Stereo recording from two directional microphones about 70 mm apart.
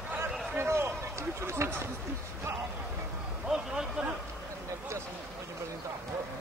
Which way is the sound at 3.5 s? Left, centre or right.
Centre.